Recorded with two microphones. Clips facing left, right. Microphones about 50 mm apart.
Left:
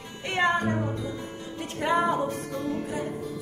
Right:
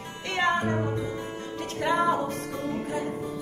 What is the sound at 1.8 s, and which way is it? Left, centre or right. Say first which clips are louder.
Music: even; centre.